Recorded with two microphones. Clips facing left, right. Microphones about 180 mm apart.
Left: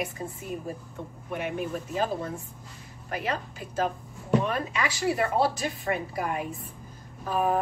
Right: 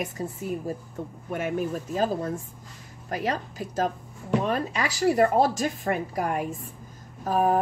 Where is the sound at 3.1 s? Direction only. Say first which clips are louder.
Right 3 dB; 40° right (ahead or behind).